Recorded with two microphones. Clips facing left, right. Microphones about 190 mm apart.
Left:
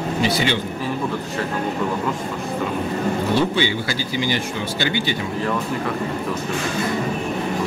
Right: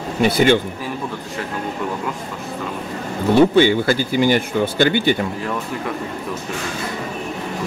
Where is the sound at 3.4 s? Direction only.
50° right (ahead or behind).